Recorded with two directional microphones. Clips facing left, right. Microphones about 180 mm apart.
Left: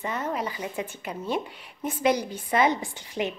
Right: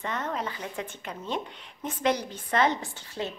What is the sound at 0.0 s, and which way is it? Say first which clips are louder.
Speech: left 2 dB; 10° left (ahead or behind).